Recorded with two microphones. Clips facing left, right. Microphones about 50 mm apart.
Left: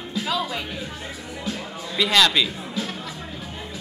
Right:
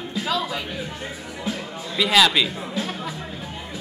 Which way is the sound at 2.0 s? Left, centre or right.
Centre.